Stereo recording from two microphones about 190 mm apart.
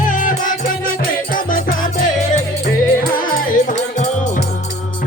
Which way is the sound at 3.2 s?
40° left (ahead or behind).